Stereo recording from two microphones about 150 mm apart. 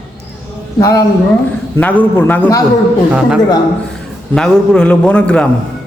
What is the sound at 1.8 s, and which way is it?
Speech, 10° left (ahead or behind).